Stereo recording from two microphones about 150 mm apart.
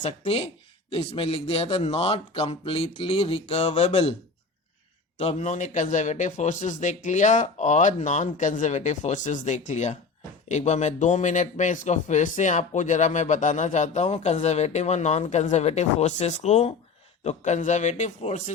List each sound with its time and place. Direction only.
0.0 s a man's voice: 45° left (ahead or behind)
5.1 s a man's voice: 45° left (ahead or behind)